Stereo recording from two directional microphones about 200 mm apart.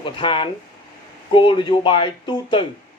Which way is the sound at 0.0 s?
25° left (ahead or behind).